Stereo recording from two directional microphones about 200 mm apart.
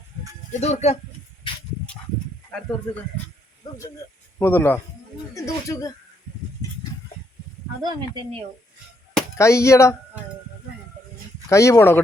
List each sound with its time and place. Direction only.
0.5 s speech: 35° left (ahead or behind)
4.4 s speech: 10° left (ahead or behind)
7.8 s speech: 20° right (ahead or behind)
9.4 s speech: 15° left (ahead or behind)
11.4 s speech: 15° left (ahead or behind)